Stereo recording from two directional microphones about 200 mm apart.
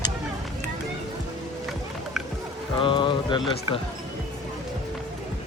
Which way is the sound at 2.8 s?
25° left (ahead or behind).